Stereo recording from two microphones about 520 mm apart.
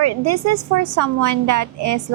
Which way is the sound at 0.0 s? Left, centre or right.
Right.